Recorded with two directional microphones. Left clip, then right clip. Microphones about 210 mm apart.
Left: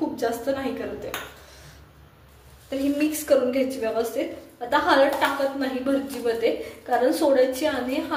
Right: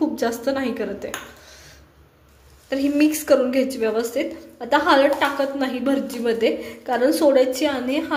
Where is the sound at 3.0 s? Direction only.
40° right (ahead or behind).